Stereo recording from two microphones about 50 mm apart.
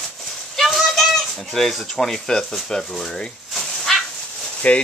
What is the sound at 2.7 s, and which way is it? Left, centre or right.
Speech, centre.